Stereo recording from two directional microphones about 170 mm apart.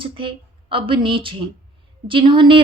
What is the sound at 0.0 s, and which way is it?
A woman's voice, 30° right (ahead or behind).